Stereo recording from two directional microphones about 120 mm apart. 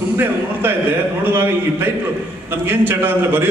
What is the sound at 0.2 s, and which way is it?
A man's voice, 15° right (ahead or behind).